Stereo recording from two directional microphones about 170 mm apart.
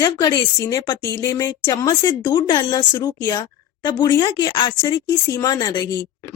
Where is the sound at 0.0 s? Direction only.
25° left (ahead or behind).